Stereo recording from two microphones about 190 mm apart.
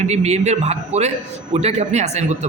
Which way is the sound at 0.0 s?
35° right (ahead or behind).